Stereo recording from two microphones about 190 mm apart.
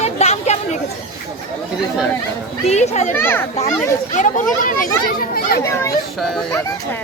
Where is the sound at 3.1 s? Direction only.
10° left (ahead or behind).